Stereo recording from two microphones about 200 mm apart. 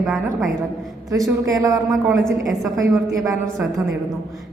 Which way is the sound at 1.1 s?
15° right (ahead or behind).